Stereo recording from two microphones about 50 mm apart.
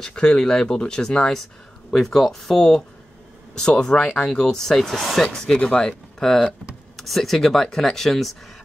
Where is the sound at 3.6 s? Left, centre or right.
Centre.